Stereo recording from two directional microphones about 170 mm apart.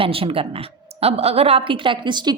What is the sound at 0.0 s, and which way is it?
A woman's voice, 35° right (ahead or behind).